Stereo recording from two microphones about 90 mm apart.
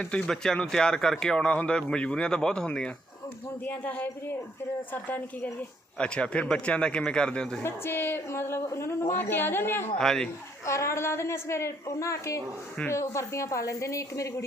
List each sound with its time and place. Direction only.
0.0 s a woman's voice: 10° left (ahead or behind)
7.6 s a woman's voice: 25° left (ahead or behind)
10.0 s a man's voice: 5° left (ahead or behind)
10.7 s a woman's voice: 35° left (ahead or behind)